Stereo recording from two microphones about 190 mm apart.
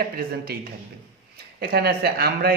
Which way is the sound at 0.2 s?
50° right (ahead or behind).